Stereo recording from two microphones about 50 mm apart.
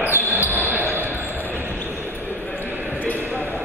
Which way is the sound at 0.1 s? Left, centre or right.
Right.